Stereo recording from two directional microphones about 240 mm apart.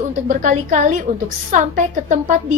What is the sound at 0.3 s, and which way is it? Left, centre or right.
A woman's voice, right.